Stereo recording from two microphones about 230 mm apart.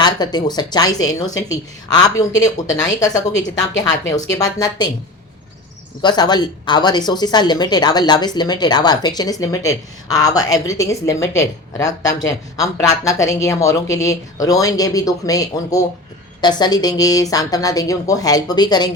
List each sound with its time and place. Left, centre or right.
0.0 s speech: centre
6.0 s speech: centre